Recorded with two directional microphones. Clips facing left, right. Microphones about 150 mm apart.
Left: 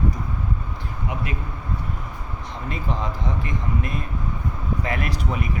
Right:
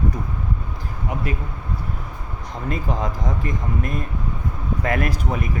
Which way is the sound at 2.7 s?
45° right (ahead or behind).